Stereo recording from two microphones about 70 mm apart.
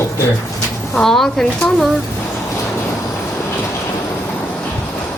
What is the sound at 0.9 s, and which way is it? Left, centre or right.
Speech, centre.